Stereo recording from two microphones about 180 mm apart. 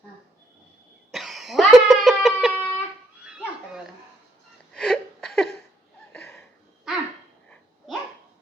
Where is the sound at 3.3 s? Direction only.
5° right (ahead or behind).